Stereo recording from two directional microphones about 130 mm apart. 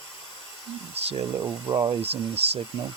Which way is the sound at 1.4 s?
25° right (ahead or behind).